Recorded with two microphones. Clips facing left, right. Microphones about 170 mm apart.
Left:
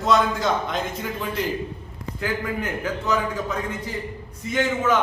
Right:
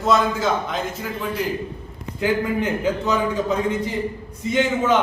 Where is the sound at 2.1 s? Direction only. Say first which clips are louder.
Right 6 dB; 20° right (ahead or behind).